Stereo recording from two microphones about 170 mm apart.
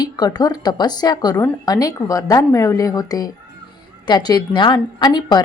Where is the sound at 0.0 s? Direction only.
25° left (ahead or behind).